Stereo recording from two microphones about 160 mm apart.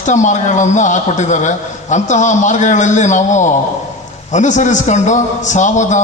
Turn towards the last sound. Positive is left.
turn(degrees=50)  # may be behind; listen again after turning